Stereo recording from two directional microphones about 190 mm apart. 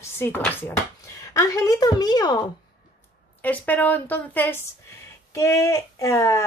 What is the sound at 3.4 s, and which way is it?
Speech, 10° left (ahead or behind).